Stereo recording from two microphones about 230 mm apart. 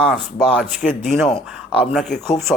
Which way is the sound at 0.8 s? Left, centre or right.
Left.